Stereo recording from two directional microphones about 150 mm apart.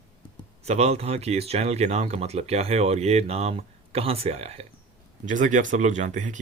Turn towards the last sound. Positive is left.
turn(degrees=-55)  # may be behind; listen again after turning